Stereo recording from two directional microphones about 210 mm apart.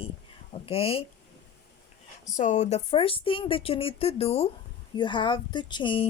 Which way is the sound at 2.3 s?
35° left (ahead or behind).